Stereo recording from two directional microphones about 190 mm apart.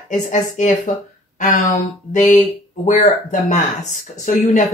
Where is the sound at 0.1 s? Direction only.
40° left (ahead or behind).